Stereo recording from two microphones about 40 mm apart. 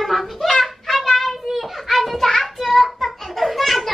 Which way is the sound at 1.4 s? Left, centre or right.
Centre.